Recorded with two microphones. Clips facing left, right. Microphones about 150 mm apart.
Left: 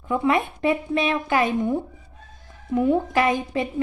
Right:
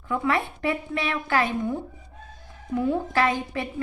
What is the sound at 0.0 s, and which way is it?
Speech, 20° left (ahead or behind).